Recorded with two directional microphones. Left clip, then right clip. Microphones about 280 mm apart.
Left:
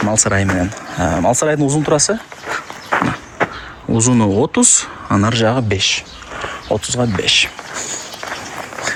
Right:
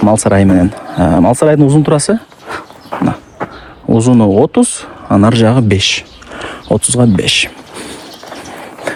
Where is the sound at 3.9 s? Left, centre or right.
Centre.